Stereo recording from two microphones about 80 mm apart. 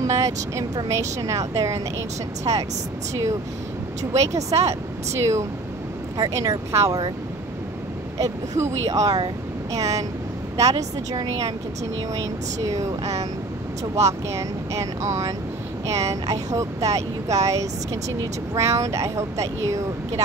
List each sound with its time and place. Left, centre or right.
0.0 s speech: right
2.5 s speech: right
4.2 s speech: right
8.2 s speech: right